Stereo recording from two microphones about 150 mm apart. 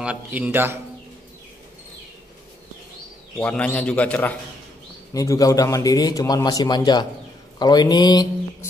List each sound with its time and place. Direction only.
0.0 s a man's voice: 10° right (ahead or behind)
3.3 s a man's voice: 10° left (ahead or behind)
5.1 s a man's voice: 20° left (ahead or behind)